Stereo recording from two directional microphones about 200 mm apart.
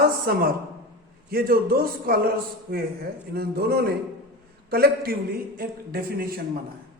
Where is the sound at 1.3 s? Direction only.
45° right (ahead or behind).